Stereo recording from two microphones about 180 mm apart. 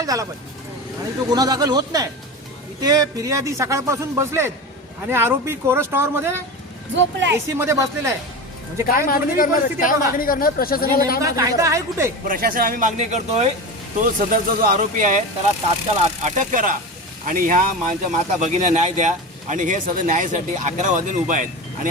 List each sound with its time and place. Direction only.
0.0 s speech: 20° right (ahead or behind)
1.3 s a man's voice: 20° right (ahead or behind)
6.9 s speech: 85° right
7.3 s a man's voice: 15° right (ahead or behind)
8.9 s speech: 55° left (ahead or behind)
11.2 s a man's voice: 20° right (ahead or behind)
12.3 s speech: 50° right (ahead or behind)
14.0 s speech: 50° right (ahead or behind)
16.2 s speech: 45° right (ahead or behind)